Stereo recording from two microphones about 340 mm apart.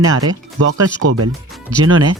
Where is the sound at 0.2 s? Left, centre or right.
Right.